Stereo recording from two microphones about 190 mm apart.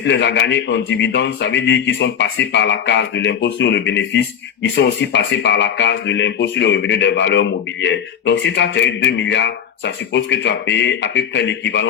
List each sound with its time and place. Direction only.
0.0 s speech: 70° left (ahead or behind)